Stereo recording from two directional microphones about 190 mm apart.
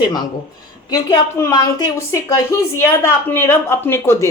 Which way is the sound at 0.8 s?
20° left (ahead or behind).